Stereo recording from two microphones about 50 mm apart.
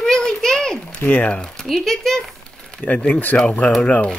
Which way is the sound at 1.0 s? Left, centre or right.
Left.